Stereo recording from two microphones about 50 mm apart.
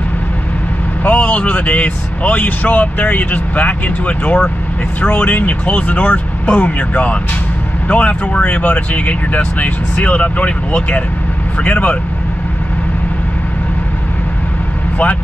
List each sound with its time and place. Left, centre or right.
1.0 s speech: left